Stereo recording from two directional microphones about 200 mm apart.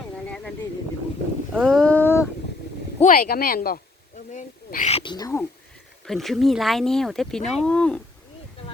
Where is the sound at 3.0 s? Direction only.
45° left (ahead or behind); by 5.5 s 15° left (ahead or behind).